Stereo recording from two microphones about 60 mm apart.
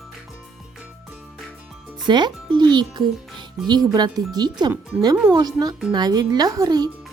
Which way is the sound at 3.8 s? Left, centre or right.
Right.